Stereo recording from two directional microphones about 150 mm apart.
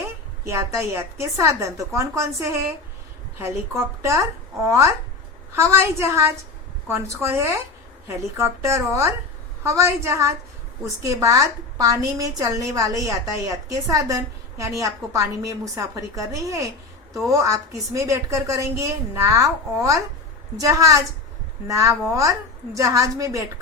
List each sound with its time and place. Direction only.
0.4 s a woman's voice: 20° right (ahead or behind)